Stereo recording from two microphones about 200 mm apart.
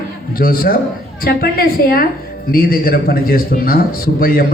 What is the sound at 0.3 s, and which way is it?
A woman's voice, 45° left (ahead or behind).